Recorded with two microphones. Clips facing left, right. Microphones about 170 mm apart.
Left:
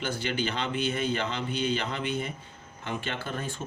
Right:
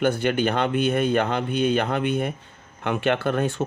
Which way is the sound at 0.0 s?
55° right (ahead or behind).